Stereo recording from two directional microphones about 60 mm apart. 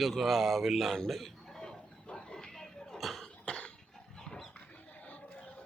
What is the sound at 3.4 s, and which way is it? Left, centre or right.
Cough, centre.